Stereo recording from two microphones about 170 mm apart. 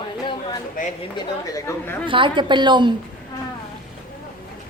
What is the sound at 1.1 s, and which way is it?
Speech, 15° left (ahead or behind).